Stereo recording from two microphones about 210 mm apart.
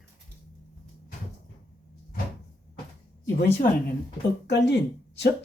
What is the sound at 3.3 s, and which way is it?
Speech, 45° left (ahead or behind).